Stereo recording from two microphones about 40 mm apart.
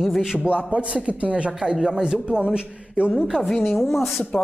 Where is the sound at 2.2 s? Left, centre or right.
Right.